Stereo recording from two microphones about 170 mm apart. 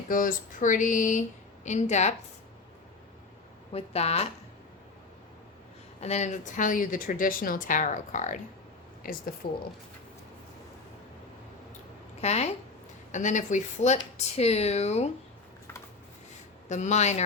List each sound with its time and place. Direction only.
0.1 s a woman's voice: 50° left (ahead or behind)
3.7 s speech: 35° left (ahead or behind)
6.0 s a woman's voice: 40° left (ahead or behind); by 9.6 s 65° left (ahead or behind)
12.2 s a woman's voice: 40° left (ahead or behind)
16.6 s a woman's voice: 45° left (ahead or behind)